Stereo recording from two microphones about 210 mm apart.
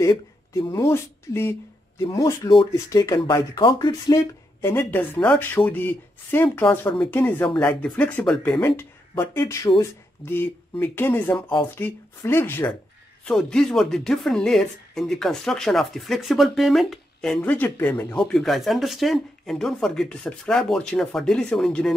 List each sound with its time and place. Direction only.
0.0 s speech: 15° left (ahead or behind)
4.6 s speech: 10° left (ahead or behind)